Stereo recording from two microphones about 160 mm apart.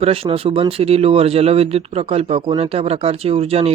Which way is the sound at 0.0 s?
35° right (ahead or behind).